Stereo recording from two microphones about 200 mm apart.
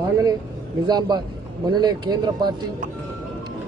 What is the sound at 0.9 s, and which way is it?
A man's voice, 20° right (ahead or behind).